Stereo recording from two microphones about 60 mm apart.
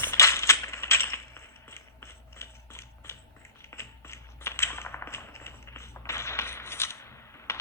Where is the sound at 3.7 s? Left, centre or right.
Left.